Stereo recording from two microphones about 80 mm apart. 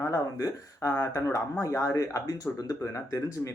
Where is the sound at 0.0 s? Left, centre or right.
Left.